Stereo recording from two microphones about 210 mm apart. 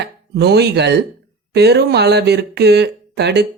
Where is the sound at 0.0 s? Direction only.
50° right (ahead or behind).